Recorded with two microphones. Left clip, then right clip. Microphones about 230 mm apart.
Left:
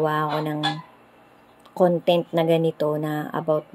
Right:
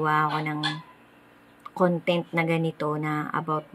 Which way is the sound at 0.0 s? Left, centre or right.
Centre.